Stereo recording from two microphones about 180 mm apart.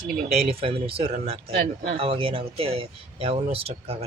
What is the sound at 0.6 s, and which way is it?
Speech, 30° right (ahead or behind).